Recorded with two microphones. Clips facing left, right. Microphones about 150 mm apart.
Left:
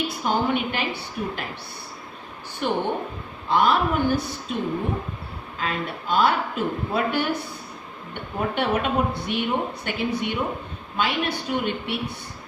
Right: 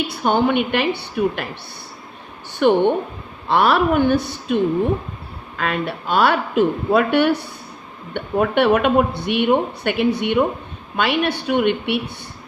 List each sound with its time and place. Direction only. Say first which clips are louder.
0.1 s speech: right 6 dB; 75° right (ahead or behind)
2.5 s a woman's voice: right 10 dB; 75° right (ahead or behind)
5.5 s speech: right 6 dB; 70° right (ahead or behind)